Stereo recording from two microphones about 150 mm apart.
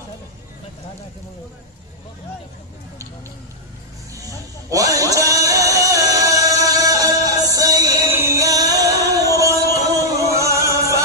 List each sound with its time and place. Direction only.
4.6 s music: 20° right (ahead or behind)